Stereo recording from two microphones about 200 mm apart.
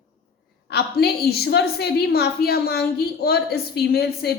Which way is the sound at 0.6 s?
55° left (ahead or behind).